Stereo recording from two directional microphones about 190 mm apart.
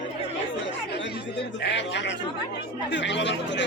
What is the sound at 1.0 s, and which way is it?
Speech, 65° left (ahead or behind).